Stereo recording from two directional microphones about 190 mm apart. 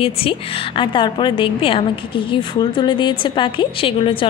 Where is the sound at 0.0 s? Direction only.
30° left (ahead or behind).